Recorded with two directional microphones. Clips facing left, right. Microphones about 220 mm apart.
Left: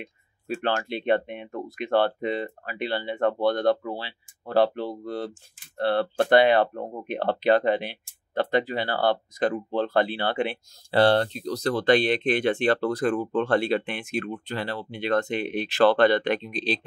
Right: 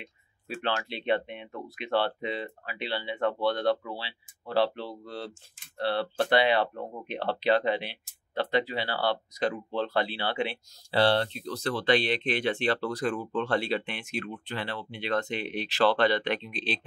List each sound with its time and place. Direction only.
0.6 s speech: 50° left (ahead or behind)